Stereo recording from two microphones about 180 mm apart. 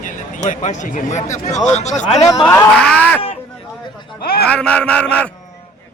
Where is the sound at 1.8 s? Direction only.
40° left (ahead or behind).